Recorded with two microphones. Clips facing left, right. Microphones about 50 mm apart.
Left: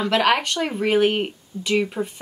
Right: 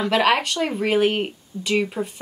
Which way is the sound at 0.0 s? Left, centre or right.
Centre.